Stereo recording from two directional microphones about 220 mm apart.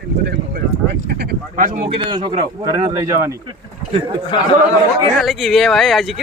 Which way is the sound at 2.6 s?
15° right (ahead or behind).